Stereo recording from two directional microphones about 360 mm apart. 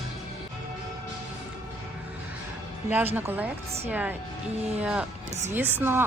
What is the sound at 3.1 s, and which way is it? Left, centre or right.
Speech, centre.